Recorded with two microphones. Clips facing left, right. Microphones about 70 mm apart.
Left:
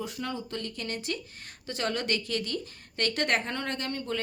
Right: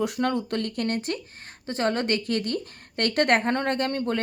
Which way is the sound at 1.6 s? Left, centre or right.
Right.